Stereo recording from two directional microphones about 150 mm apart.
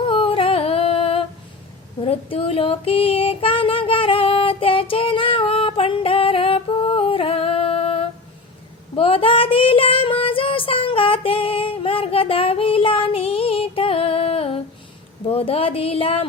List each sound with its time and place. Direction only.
0.0 s singing: 35° left (ahead or behind)
2.0 s child singing: 35° left (ahead or behind)
15.3 s speech: 40° left (ahead or behind)